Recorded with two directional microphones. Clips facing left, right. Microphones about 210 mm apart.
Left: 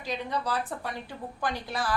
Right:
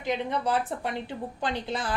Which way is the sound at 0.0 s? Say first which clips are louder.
Right 4 dB; 20° right (ahead or behind).